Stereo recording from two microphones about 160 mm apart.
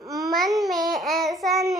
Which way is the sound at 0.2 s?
Centre (ahead or behind).